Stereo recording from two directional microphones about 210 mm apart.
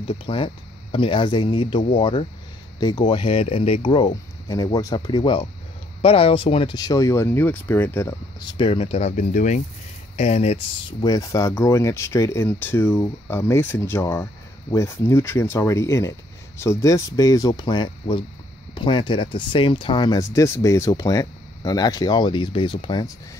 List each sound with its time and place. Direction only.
0.0 s speech: 25° left (ahead or behind)